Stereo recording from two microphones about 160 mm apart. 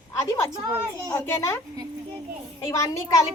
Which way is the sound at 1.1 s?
15° left (ahead or behind).